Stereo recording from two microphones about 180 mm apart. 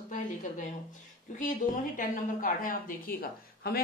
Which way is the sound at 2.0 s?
50° left (ahead or behind).